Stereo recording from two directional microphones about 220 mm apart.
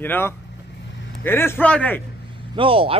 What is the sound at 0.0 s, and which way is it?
Speech, 10° left (ahead or behind).